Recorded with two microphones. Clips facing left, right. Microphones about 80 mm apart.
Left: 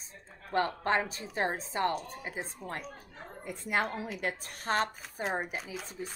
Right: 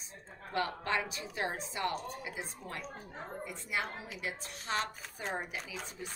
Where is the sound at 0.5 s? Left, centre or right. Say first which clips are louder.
Left 5 dB; left.